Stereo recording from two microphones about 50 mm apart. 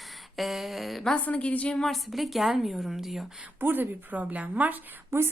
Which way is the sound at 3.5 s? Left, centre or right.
Right.